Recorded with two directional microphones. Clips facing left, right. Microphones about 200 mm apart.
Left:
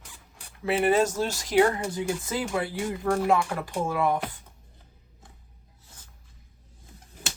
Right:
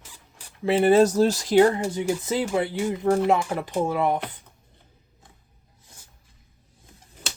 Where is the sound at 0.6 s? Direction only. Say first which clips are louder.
Right 5 dB; 30° right (ahead or behind).